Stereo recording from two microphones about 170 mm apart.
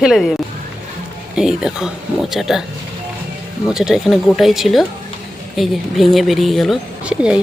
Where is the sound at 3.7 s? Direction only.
5° right (ahead or behind).